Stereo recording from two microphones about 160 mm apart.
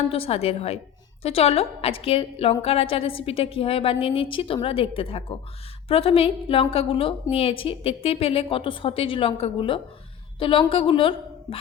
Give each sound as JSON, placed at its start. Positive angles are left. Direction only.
{"t": 0.1, "sound": "a woman's voice", "side_deg": 40}